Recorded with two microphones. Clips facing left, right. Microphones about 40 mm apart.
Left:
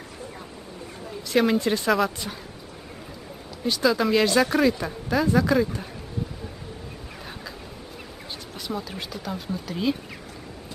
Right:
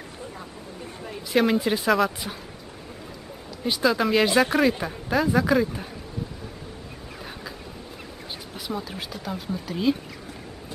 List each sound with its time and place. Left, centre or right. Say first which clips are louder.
1.3 s speech: even; centre
3.6 s speech: even; centre
8.5 s speech: even; centre